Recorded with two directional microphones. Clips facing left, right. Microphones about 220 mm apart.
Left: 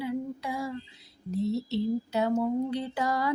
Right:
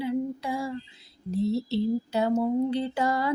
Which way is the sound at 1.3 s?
30° right (ahead or behind).